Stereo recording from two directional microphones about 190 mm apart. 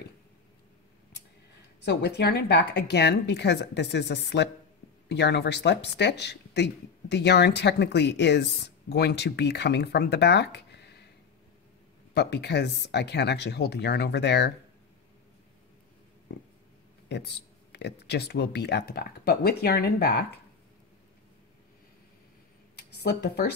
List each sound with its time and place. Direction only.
1.8 s speech: 60° left (ahead or behind)
12.1 s speech: 60° left (ahead or behind)
17.1 s speech: 65° left (ahead or behind)
22.8 s speech: 60° left (ahead or behind)